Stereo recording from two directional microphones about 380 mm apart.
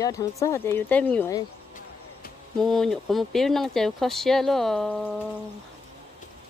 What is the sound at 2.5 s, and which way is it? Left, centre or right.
Speech, centre.